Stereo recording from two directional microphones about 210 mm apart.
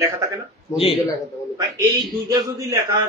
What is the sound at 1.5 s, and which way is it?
A man's voice, 15° right (ahead or behind).